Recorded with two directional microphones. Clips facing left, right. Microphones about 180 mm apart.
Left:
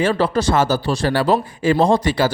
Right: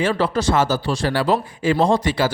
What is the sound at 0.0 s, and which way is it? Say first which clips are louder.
Speech: left 2 dB; 40° left (ahead or behind).